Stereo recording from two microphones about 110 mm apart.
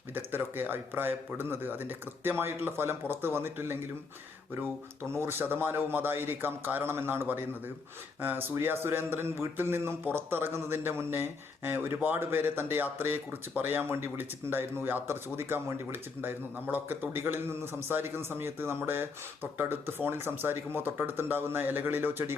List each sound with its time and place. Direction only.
0.1 s speech: 20° right (ahead or behind)
5.1 s speech: 20° right (ahead or behind)